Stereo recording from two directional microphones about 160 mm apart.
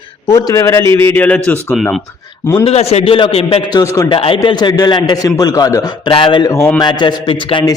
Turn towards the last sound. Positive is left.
turn(degrees=30)  # may be behind; listen again after turning